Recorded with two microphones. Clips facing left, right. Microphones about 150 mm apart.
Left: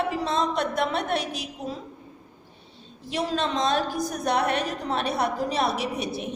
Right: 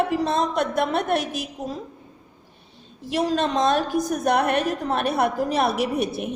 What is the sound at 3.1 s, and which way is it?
A woman's voice, 50° right (ahead or behind).